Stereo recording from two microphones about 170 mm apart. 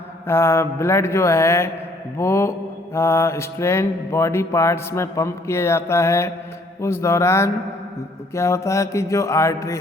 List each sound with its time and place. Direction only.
0.3 s mantra: 15° left (ahead or behind)